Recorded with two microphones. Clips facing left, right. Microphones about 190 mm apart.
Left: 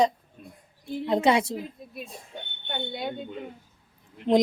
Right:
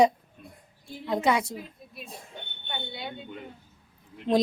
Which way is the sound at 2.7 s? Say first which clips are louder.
Left 5 dB; 50° left (ahead or behind).